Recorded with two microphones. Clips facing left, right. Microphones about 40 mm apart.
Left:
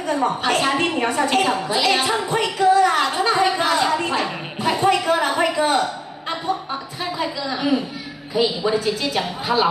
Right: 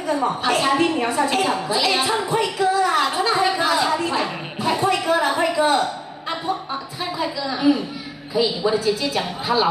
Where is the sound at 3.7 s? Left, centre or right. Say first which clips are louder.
Left 1 dB; centre.